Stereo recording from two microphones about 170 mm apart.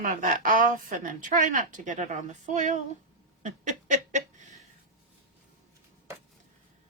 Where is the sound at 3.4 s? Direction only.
45° right (ahead or behind).